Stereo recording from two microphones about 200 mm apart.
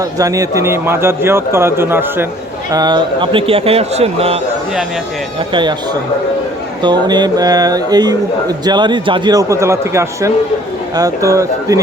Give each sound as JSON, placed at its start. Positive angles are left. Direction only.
{"t": 0.0, "sound": "a man's voice", "side_deg": -15}
{"t": 2.7, "sound": "speech", "side_deg": -20}
{"t": 5.5, "sound": "a man's voice", "side_deg": -20}